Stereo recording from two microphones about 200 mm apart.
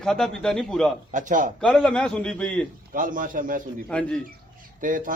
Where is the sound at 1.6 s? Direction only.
5° left (ahead or behind).